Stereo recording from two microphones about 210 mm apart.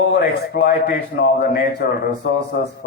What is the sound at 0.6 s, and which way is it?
A man's voice, 50° left (ahead or behind).